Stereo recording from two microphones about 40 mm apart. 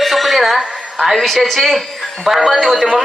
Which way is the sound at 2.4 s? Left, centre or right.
Centre.